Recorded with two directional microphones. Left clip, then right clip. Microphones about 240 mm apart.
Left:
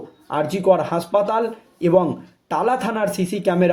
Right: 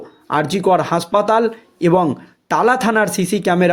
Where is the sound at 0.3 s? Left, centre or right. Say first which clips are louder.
Right 2 dB; right.